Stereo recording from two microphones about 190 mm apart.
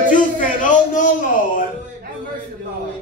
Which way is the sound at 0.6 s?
40° left (ahead or behind).